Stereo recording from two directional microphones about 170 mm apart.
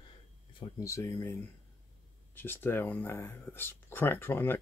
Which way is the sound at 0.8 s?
15° left (ahead or behind).